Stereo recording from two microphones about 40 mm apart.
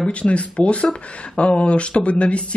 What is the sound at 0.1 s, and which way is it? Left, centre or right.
Speech, left.